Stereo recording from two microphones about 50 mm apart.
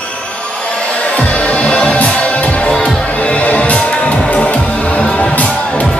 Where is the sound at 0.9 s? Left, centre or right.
Left.